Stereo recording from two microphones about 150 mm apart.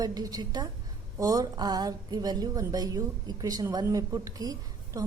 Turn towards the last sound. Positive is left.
turn(degrees=-25)  # may be behind; listen again after turning